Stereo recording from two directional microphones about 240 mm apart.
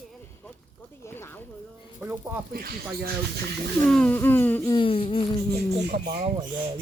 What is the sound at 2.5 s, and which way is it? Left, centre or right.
Speech, right.